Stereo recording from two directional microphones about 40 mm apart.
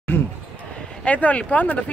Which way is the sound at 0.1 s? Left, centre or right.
Left.